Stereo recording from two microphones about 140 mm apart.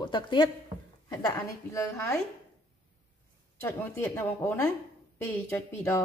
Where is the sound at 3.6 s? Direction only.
15° left (ahead or behind).